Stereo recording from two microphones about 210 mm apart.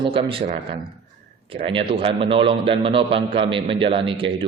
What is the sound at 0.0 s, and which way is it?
A man's voice, 25° right (ahead or behind).